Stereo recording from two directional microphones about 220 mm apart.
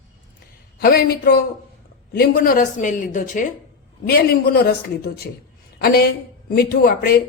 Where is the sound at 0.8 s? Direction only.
40° left (ahead or behind).